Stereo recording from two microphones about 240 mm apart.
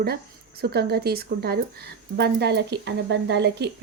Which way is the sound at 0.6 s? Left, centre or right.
Right.